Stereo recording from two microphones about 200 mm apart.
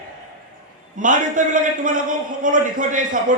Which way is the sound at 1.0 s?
40° right (ahead or behind).